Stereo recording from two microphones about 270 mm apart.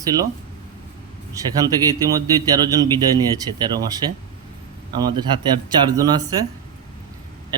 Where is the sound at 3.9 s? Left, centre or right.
Centre.